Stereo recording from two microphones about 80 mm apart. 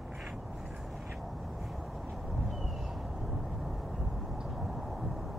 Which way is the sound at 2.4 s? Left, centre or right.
Centre.